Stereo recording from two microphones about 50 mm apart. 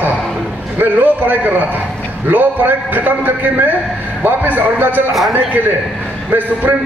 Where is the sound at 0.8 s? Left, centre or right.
Right.